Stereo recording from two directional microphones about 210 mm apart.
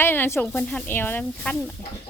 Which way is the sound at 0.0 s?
10° left (ahead or behind).